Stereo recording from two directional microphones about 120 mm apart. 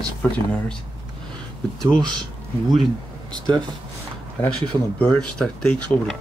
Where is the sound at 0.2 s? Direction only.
10° left (ahead or behind).